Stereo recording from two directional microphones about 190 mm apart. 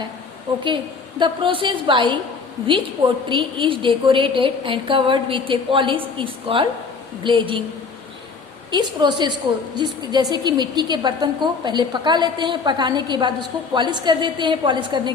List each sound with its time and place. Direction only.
1.2 s a woman's voice: 25° right (ahead or behind)
8.7 s a woman's voice: 25° right (ahead or behind)